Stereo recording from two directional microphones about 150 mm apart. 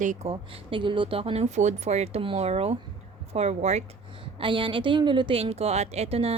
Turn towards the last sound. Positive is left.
turn(degrees=-40)  # may be behind; listen again after turning